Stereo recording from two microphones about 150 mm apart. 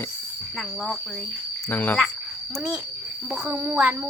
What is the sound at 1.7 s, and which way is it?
Speech, 10° left (ahead or behind).